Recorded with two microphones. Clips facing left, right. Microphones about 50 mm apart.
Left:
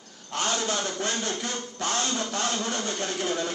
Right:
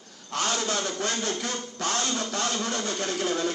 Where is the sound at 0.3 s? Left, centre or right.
Left.